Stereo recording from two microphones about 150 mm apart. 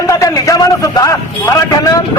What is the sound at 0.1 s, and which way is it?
A man's voice, 20° left (ahead or behind).